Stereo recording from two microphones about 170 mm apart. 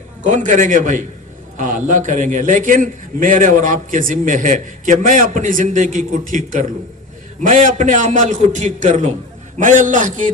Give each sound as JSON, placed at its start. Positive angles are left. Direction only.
{"t": 0.3, "sound": "a man's voice", "side_deg": -45}